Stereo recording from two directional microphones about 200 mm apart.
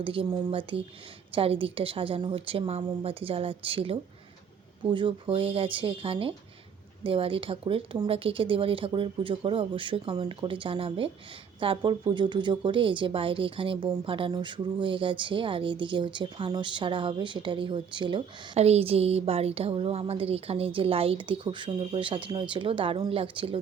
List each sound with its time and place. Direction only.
0.0 s a woman's voice: 25° right (ahead or behind)